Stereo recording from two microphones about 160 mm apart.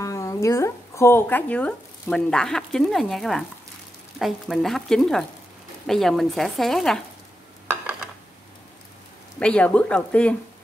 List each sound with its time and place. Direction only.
0.0 s speech: 20° left (ahead or behind); by 7.0 s centre (ahead or behind)
9.4 s speech: 5° left (ahead or behind)